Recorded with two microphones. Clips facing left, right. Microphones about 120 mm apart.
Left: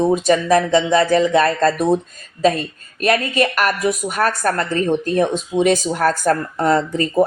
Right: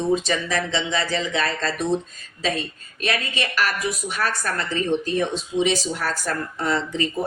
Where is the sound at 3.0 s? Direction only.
50° left (ahead or behind).